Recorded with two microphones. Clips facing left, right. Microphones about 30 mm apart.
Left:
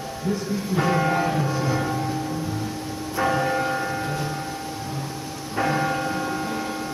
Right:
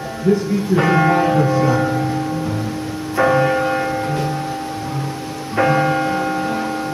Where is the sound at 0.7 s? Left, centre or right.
Right.